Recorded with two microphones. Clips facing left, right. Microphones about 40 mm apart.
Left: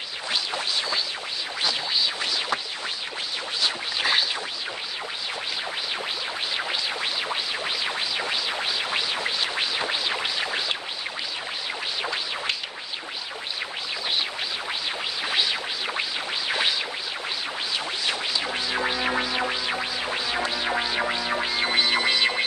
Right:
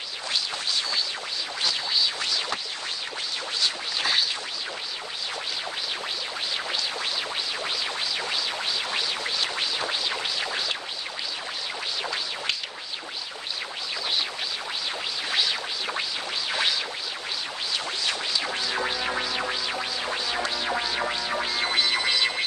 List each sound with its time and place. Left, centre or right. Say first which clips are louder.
3.6 s scratch: left 2 dB; centre
6.5 s music: left 1 dB; centre
12.0 s music: left 2 dB; centre
15.2 s music: left 1 dB; centre
16.0 s a sound: left 2 dB; centre
17.7 s music: even; centre